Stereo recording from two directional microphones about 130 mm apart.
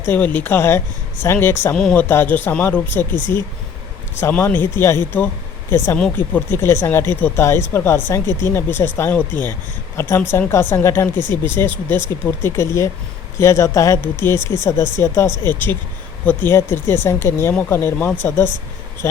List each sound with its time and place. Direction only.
0.0 s speech: 15° left (ahead or behind)
1.7 s speech: 5° left (ahead or behind)
4.2 s speech: 15° left (ahead or behind)
14.3 s speech: 35° right (ahead or behind)
14.6 s speech: 20° left (ahead or behind)